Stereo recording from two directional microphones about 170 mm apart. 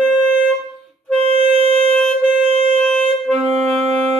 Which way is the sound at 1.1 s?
35° right (ahead or behind).